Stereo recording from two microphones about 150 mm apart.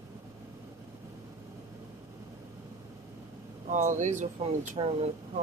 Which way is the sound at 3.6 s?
55° right (ahead or behind).